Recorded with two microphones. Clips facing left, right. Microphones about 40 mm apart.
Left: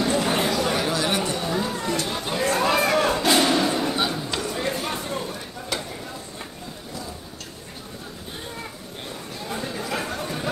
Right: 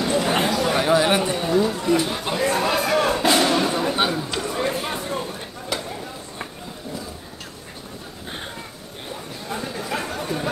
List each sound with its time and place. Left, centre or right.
0.0 s a sound: centre
0.5 s chatter: centre
0.7 s chatter: centre
1.5 s run: centre
1.9 s chatter: centre
2.7 s a sound: centre
9.5 s chatter: centre